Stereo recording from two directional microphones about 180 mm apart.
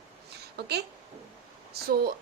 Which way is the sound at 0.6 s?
65° right (ahead or behind).